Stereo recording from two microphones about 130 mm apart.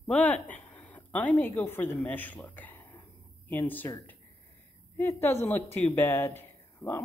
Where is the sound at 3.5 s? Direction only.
15° left (ahead or behind).